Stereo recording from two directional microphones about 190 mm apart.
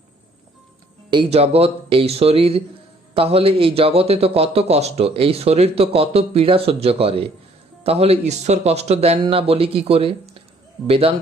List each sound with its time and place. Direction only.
1.1 s a man's voice: 30° right (ahead or behind)